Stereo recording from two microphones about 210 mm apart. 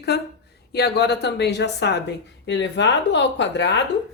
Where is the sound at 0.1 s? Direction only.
50° left (ahead or behind).